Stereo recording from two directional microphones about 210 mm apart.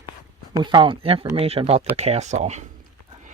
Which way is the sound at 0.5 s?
20° right (ahead or behind).